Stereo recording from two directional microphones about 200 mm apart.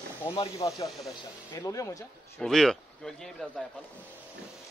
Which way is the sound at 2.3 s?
Centre (ahead or behind).